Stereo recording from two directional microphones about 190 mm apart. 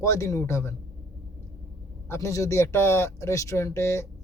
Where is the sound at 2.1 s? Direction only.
15° left (ahead or behind).